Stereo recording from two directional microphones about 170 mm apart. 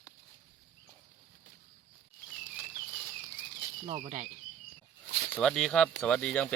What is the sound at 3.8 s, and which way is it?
Speech, 40° right (ahead or behind).